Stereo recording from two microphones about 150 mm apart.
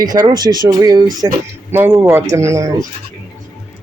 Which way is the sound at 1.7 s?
15° right (ahead or behind).